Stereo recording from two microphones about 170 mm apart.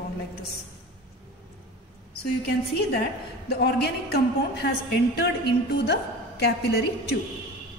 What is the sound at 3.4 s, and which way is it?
A man's voice, 75° left (ahead or behind).